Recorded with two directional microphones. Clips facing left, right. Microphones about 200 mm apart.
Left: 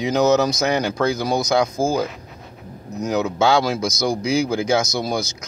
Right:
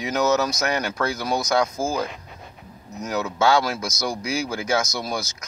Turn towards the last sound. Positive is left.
turn(degrees=15)  # may be behind; listen again after turning